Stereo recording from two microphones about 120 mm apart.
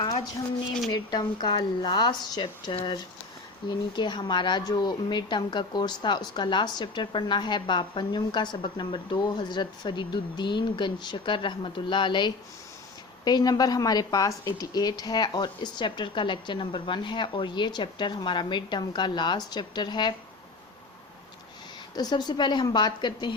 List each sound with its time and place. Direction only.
0.9 s speech: 35° left (ahead or behind)
21.9 s speech: 35° left (ahead or behind)